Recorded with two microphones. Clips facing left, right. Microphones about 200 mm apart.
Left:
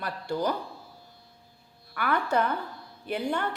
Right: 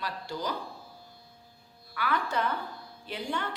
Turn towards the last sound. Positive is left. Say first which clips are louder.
# left 5 dB
turn(degrees=60)  # may be behind; listen again after turning